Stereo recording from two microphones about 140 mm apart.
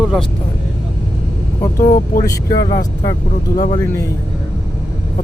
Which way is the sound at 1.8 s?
70° left (ahead or behind).